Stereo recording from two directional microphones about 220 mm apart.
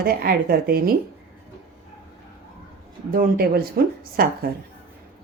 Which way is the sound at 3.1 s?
40° right (ahead or behind).